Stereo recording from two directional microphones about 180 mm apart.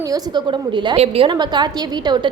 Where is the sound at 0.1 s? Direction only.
25° right (ahead or behind).